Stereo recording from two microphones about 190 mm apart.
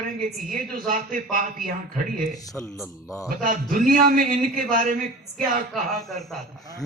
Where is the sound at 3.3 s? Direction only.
45° right (ahead or behind).